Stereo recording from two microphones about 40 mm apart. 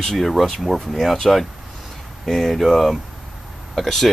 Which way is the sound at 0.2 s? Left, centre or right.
Centre.